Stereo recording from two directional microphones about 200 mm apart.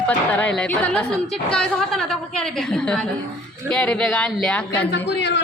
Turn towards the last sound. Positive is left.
turn(degrees=60)  # may be behind; listen again after turning